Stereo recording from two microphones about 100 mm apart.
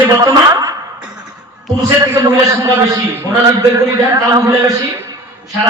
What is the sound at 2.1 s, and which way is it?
A man's voice, 30° right (ahead or behind).